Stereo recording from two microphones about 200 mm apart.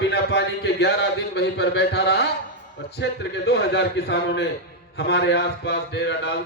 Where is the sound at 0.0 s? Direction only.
55° left (ahead or behind).